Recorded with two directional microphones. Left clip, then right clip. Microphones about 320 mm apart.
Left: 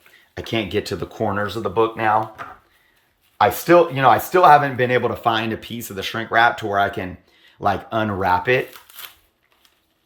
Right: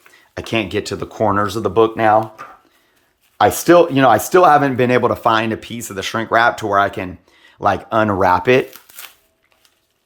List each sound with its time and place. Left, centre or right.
0.1 s speech: centre; by 2.2 s right
3.3 s speech: right